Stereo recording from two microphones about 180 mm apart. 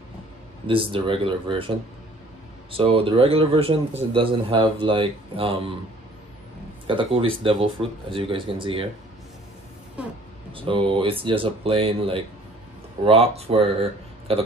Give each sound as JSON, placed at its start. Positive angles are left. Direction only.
{"t": 0.7, "sound": "speech", "side_deg": -30}
{"t": 2.7, "sound": "speech", "side_deg": -30}
{"t": 6.9, "sound": "speech", "side_deg": -30}
{"t": 10.5, "sound": "speech", "side_deg": -30}